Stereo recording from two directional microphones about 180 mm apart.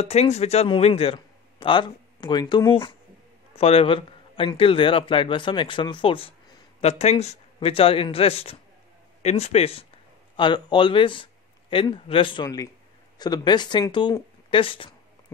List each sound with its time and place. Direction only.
0.0 s a man's voice: 35° left (ahead or behind)